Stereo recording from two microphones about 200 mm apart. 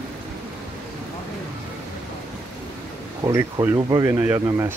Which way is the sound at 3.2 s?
20° right (ahead or behind).